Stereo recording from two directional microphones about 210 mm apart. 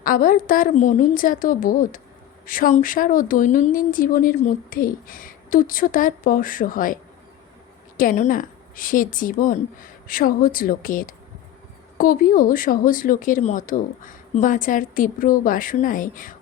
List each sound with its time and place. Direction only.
0.0 s speech: 40° left (ahead or behind)
7.9 s speech: 40° left (ahead or behind)